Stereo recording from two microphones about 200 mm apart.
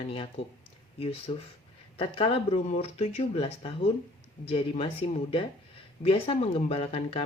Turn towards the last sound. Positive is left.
turn(degrees=25)  # may be behind; listen again after turning